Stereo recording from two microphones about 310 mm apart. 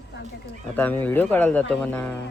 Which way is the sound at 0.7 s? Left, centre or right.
Centre.